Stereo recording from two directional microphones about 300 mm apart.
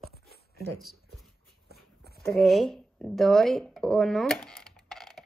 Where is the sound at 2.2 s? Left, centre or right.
Centre.